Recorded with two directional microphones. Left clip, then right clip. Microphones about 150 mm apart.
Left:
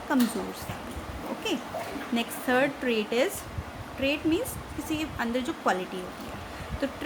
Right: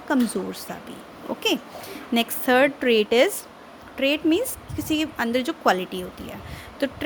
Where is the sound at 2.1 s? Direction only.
75° right (ahead or behind).